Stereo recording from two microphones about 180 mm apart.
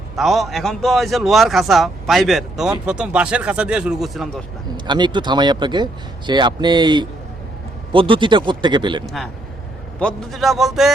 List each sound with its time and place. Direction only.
0.2 s speech: centre (ahead or behind)
4.9 s speech: 25° right (ahead or behind)
9.0 s speech: centre (ahead or behind)